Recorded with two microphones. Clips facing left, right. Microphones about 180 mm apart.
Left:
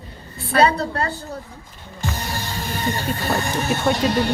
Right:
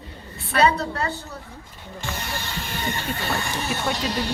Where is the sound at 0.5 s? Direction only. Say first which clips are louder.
Left 3 dB; 35° left (ahead or behind).